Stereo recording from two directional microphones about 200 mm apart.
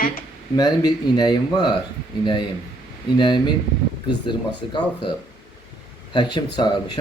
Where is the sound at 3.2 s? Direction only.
20° left (ahead or behind).